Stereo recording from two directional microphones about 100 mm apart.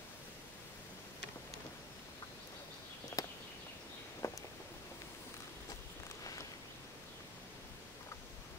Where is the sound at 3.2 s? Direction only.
35° left (ahead or behind).